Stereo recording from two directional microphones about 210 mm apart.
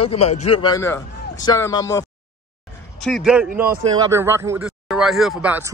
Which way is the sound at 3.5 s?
45° right (ahead or behind).